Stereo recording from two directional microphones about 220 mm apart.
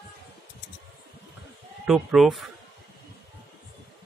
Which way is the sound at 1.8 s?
Centre (ahead or behind).